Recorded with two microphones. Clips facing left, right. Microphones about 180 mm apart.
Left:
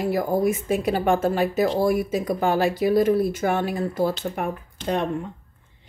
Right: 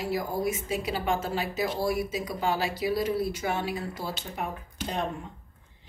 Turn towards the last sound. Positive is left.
turn(degrees=60)  # may be behind; listen again after turning